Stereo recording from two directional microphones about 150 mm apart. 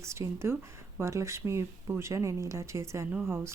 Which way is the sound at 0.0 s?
20° right (ahead or behind).